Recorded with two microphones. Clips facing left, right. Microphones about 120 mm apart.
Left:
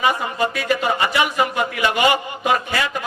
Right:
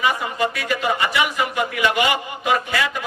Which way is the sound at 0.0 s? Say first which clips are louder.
Left 1 dB; 30° left (ahead or behind).